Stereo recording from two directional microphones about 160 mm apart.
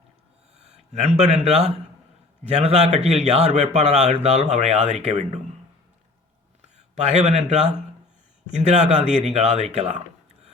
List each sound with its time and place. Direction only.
0.6 s a man's voice: 40° right (ahead or behind)
6.6 s a man's voice: 45° right (ahead or behind)